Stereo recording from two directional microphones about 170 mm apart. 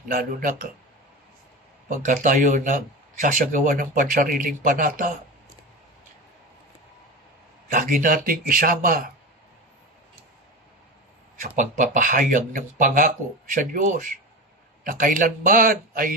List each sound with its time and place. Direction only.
0.1 s a man's voice: 55° right (ahead or behind)
1.9 s speech: 50° right (ahead or behind)
7.7 s a man's voice: 50° right (ahead or behind)
11.4 s a man's voice: 50° right (ahead or behind)